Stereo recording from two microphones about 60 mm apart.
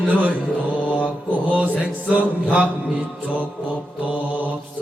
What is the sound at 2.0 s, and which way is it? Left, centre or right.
Music, right.